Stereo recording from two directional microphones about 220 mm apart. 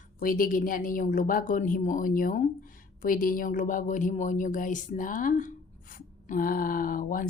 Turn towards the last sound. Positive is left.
turn(degrees=40)  # may be behind; listen again after turning